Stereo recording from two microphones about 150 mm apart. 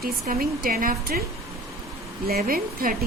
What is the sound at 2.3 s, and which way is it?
Speech, 80° right.